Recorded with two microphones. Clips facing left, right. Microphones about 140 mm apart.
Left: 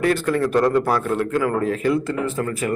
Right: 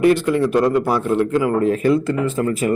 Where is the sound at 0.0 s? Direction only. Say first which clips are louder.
Right 4 dB; 15° right (ahead or behind).